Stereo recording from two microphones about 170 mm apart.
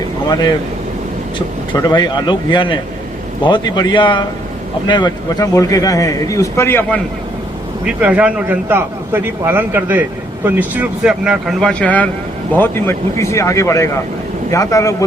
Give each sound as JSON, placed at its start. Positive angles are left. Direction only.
{"t": 1.9, "sound": "a man's voice", "side_deg": 25}
{"t": 7.9, "sound": "a man's voice", "side_deg": -10}